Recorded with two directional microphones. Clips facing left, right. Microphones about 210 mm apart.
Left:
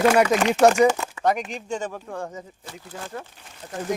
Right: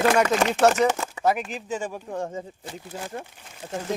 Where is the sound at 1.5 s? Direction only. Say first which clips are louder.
Left 1 dB; 5° right (ahead or behind).